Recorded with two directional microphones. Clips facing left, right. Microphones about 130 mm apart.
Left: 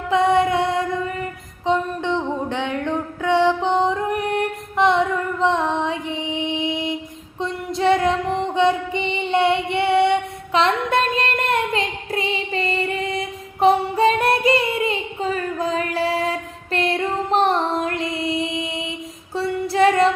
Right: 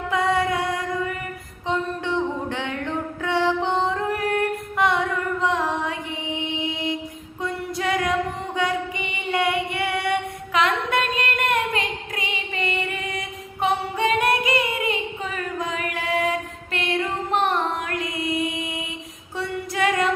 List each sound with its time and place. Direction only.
0.1 s music: 25° left (ahead or behind)
1.6 s a sound: 20° left (ahead or behind)
5.4 s female singing: 25° left (ahead or behind)
7.4 s music: 30° left (ahead or behind)
8.5 s female singing: 25° left (ahead or behind)
16.7 s music: 35° left (ahead or behind)
19.4 s female singing: 30° left (ahead or behind)